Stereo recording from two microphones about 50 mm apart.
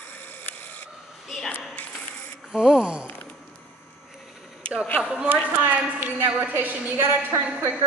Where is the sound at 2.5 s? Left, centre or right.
Centre.